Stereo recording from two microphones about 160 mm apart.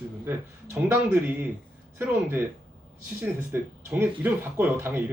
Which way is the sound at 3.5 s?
10° right (ahead or behind).